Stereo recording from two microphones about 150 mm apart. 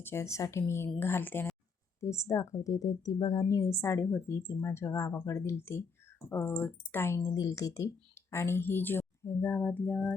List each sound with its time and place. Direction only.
0.0 s a woman's voice: 15° left (ahead or behind)